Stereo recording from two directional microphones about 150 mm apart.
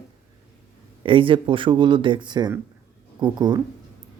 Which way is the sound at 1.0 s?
35° right (ahead or behind).